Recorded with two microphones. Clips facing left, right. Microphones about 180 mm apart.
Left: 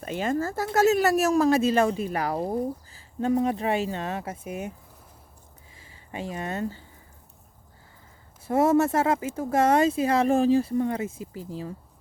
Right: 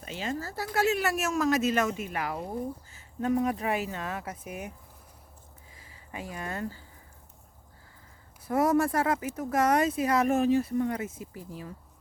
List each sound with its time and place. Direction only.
0.0 s speech: 50° left (ahead or behind); by 4.7 s 25° left (ahead or behind)
5.7 s speech: 25° left (ahead or behind)
8.4 s speech: 25° left (ahead or behind)